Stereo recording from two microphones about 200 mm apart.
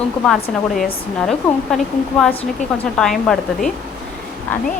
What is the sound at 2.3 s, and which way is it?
Speech, 30° left (ahead or behind).